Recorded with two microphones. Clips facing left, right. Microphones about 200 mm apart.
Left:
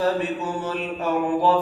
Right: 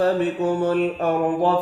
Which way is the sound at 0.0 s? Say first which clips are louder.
Right 4 dB; 55° right (ahead or behind).